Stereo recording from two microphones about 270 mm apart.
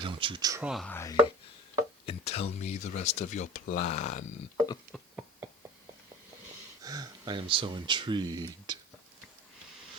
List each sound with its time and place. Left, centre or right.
0.0 s speech: centre
2.0 s speech: left
4.9 s a sound: centre
6.8 s speech: centre